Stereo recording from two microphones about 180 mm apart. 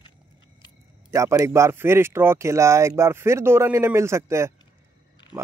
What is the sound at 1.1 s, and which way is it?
Speech, 15° right (ahead or behind).